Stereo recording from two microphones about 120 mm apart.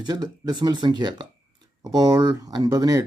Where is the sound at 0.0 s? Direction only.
35° right (ahead or behind).